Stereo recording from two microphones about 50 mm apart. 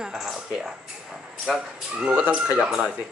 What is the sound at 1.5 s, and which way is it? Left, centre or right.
Speech, centre.